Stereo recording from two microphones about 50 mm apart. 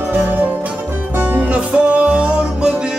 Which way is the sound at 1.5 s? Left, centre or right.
Right.